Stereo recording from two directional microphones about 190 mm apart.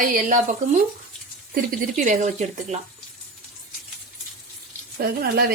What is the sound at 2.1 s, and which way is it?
Speech, 40° right (ahead or behind).